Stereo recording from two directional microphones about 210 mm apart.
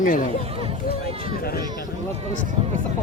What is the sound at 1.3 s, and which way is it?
Speech, 45° left (ahead or behind).